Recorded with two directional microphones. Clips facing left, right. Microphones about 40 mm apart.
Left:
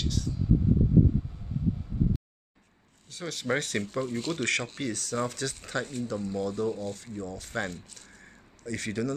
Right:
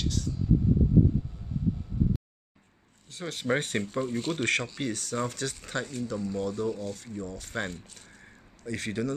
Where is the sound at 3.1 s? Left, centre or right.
Right.